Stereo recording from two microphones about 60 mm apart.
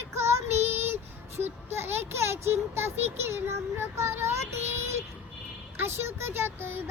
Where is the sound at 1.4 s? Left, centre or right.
Right.